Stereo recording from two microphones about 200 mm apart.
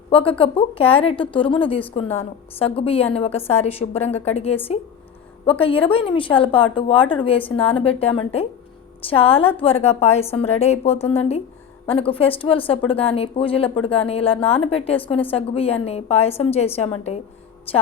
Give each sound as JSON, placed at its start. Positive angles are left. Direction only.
{"t": 0.1, "sound": "a woman's voice", "side_deg": 25}